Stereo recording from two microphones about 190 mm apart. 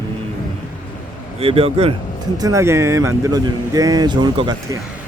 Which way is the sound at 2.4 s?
15° right (ahead or behind).